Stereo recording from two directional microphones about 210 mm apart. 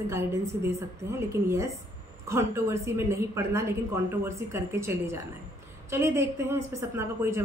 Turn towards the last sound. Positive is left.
turn(degrees=-10)  # may be behind; listen again after turning